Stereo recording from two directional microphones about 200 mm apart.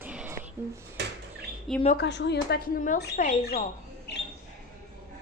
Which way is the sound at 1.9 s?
60° left (ahead or behind).